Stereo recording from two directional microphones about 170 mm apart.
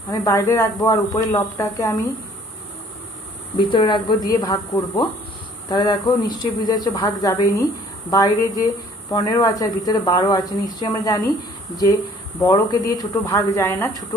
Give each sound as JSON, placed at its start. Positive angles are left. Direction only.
{"t": 0.1, "sound": "speech", "side_deg": 20}
{"t": 3.5, "sound": "speech", "side_deg": 25}
{"t": 12.4, "sound": "a woman's voice", "side_deg": 20}